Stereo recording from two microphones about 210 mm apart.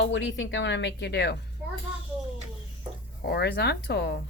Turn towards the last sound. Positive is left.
turn(degrees=50)  # may be behind; listen again after turning